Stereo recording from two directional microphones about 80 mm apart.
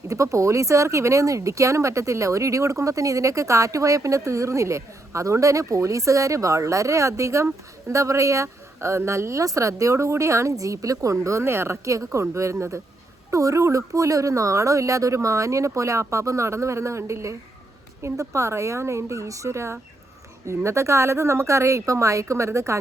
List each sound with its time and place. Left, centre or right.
0.1 s speech: right